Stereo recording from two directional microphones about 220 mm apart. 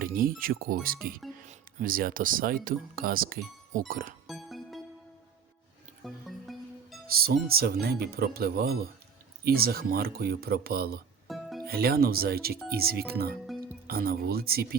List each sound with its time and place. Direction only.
0.0 s speech: 40° right (ahead or behind)
4.3 s music: centre (ahead or behind)
6.0 s music: centre (ahead or behind)
7.2 s speech: 45° right (ahead or behind)
11.3 s music: centre (ahead or behind)
11.6 s speech: 45° right (ahead or behind)